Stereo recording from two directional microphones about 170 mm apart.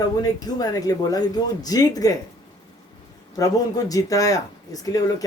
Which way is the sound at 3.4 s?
20° left (ahead or behind).